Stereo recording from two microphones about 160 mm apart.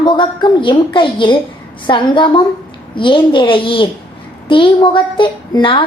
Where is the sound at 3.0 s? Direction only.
30° left (ahead or behind).